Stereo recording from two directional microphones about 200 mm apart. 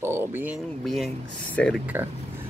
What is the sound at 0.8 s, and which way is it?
Speech, centre (ahead or behind).